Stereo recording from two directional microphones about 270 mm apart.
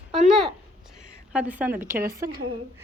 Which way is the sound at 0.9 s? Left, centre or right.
Centre.